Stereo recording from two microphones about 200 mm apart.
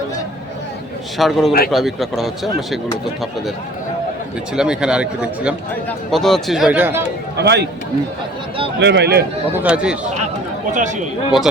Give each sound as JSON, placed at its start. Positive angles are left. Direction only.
{"t": 1.2, "sound": "speech", "side_deg": 0}
{"t": 4.5, "sound": "speech", "side_deg": -5}
{"t": 7.3, "sound": "a man's voice", "side_deg": -55}
{"t": 8.8, "sound": "a man's voice", "side_deg": -60}
{"t": 9.6, "sound": "speech", "side_deg": -5}
{"t": 10.8, "sound": "speech", "side_deg": -40}